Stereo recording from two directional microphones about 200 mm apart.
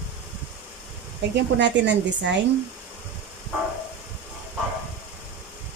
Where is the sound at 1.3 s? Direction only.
60° right (ahead or behind).